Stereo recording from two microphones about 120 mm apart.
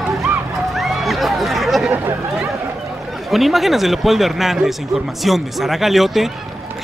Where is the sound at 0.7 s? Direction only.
Centre (ahead or behind).